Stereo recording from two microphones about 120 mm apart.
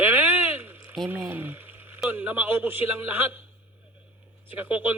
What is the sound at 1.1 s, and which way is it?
A man's voice, 15° right (ahead or behind).